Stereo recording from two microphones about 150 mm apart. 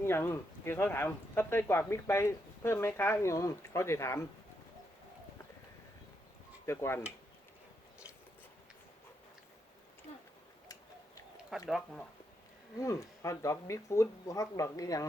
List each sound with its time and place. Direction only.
0.0 s speech: 15° left (ahead or behind)
6.7 s speech: 15° left (ahead or behind)
10.1 s a sound: 50° left (ahead or behind)
11.7 s speech: 5° left (ahead or behind)
12.8 s speech: 20° left (ahead or behind)